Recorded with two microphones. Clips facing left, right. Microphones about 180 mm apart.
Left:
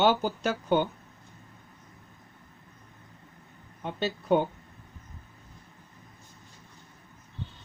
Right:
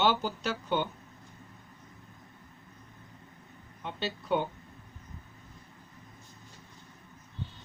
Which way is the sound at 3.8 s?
50° left (ahead or behind).